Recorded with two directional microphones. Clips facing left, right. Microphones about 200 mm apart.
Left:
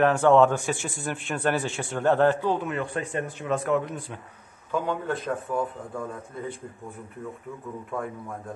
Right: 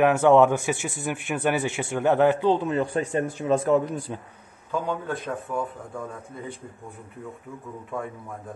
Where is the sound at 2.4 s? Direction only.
30° right (ahead or behind).